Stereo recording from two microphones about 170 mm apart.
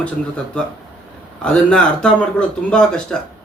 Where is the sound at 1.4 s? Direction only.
5° left (ahead or behind).